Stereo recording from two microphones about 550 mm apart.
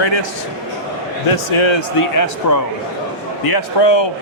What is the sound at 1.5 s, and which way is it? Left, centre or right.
Speech, left.